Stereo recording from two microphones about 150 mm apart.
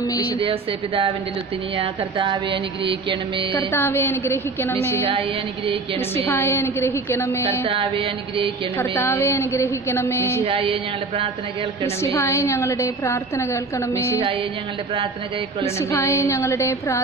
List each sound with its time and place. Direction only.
0.4 s music: 35° right (ahead or behind)
3.7 s a woman's voice: 15° left (ahead or behind)
6.1 s a woman's voice: 15° left (ahead or behind)
7.6 s music: 40° right (ahead or behind)
8.7 s a woman's voice: 15° left (ahead or behind)
10.4 s music: 40° right (ahead or behind)
11.8 s a woman's voice: 15° left (ahead or behind)
15.8 s a woman's voice: 20° left (ahead or behind)